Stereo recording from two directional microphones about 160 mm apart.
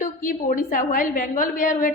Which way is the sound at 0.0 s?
55° left (ahead or behind).